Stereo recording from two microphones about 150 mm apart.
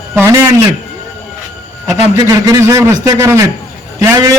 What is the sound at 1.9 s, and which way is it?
A man's voice, 20° right (ahead or behind).